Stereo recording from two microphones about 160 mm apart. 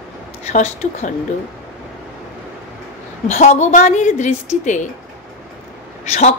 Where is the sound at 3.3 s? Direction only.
45° left (ahead or behind).